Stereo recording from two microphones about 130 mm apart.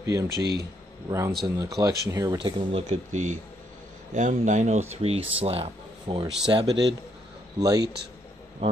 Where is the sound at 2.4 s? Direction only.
40° right (ahead or behind).